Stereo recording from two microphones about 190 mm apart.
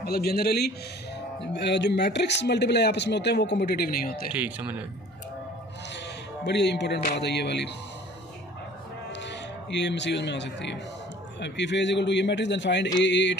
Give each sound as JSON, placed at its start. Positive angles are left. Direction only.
{"t": 0.0, "sound": "speech", "side_deg": 55}
{"t": 4.3, "sound": "speech", "side_deg": -10}
{"t": 6.4, "sound": "speech", "side_deg": 65}
{"t": 9.1, "sound": "a man's voice", "side_deg": 70}